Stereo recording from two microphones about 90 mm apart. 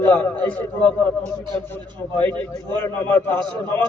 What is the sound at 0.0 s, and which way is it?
A man's voice, 20° left (ahead or behind).